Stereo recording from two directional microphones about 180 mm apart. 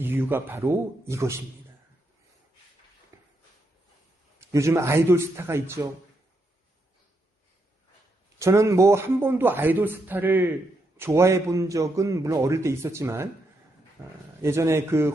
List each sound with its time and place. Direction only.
0.0 s a man's voice: 10° right (ahead or behind)
3.1 s a sound: 15° right (ahead or behind)
4.4 s a man's voice: 15° right (ahead or behind)
8.4 s a man's voice: 15° right (ahead or behind)
14.4 s a man's voice: 15° right (ahead or behind)